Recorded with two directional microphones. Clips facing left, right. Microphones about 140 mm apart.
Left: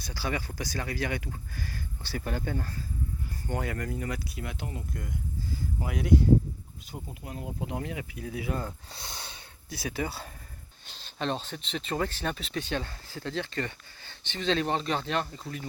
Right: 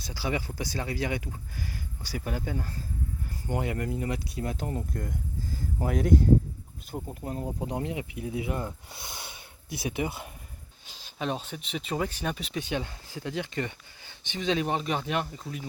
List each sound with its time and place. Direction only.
0.0 s speech: 20° right (ahead or behind)
3.4 s speech: 20° right (ahead or behind)